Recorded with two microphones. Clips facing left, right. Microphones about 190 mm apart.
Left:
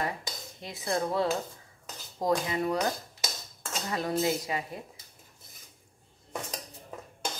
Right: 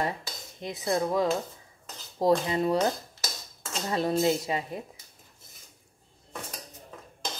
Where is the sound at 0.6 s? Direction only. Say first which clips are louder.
Right 3 dB; 20° right (ahead or behind).